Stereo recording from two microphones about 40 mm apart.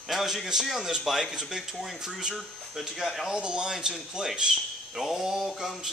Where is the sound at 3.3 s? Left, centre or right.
Right.